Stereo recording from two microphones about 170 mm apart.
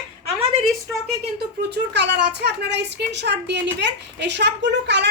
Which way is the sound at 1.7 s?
85° right.